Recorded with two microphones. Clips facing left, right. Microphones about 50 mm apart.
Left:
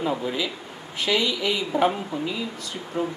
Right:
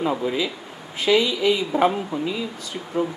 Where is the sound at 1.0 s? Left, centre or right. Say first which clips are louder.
Right 5 dB; right.